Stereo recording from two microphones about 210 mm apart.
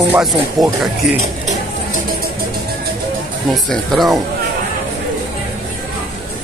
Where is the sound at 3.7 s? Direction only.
Centre (ahead or behind).